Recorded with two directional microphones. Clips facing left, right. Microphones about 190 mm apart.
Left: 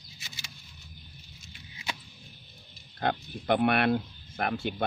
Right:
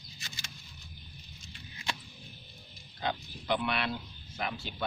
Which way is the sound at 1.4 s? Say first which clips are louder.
Even; 5° left (ahead or behind).